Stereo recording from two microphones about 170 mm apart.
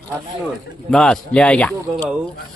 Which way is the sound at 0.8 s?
5° left (ahead or behind).